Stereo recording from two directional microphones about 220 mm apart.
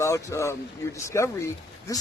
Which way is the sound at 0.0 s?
15° left (ahead or behind).